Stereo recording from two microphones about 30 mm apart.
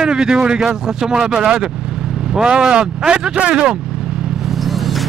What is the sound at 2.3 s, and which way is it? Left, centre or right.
Speech, right.